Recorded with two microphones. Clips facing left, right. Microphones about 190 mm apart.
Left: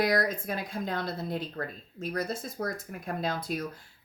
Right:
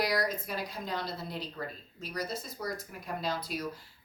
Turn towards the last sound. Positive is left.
turn(degrees=50)  # may be behind; listen again after turning